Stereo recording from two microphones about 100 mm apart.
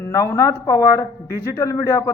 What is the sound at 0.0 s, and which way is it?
A man's voice, 30° left (ahead or behind).